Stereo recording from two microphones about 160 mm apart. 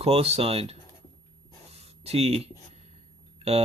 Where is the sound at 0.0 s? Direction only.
40° right (ahead or behind).